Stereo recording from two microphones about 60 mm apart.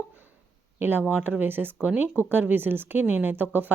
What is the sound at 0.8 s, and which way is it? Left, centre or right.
Speech, right.